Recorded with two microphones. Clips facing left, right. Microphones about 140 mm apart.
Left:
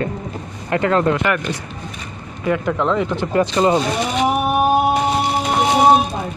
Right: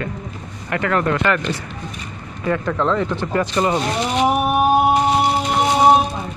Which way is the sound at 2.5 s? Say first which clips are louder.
Left 1 dB; 15° left (ahead or behind).